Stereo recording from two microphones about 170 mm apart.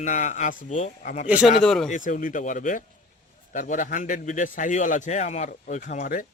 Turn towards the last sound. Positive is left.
turn(degrees=55)  # may be behind; listen again after turning